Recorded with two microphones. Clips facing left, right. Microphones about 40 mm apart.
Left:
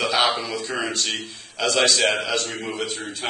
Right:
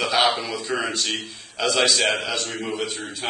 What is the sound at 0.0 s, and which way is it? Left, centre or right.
A man's voice, centre.